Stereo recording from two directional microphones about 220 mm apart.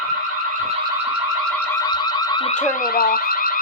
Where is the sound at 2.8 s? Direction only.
40° left (ahead or behind).